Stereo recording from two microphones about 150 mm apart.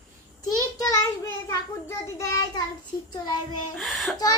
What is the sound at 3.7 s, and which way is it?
Speech, centre (ahead or behind).